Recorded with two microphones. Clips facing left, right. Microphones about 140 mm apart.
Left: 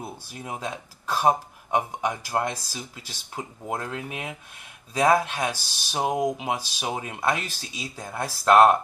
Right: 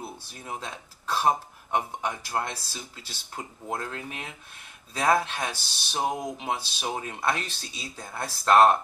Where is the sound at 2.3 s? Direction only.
25° left (ahead or behind).